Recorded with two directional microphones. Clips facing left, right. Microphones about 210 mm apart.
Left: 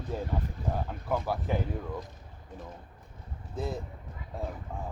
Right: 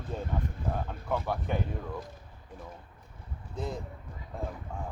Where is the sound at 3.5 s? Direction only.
5° left (ahead or behind).